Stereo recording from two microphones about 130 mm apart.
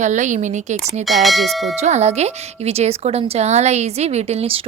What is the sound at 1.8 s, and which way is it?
Speech, 60° right (ahead or behind).